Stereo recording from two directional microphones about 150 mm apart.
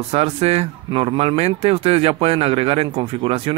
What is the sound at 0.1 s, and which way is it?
Speech, 45° right (ahead or behind).